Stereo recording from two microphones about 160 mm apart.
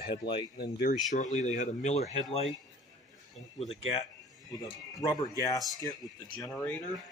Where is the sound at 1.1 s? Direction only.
50° left (ahead or behind).